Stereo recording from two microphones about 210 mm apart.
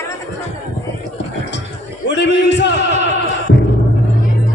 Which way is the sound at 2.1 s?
55° left (ahead or behind).